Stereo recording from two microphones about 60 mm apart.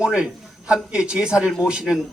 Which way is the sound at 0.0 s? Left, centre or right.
Centre.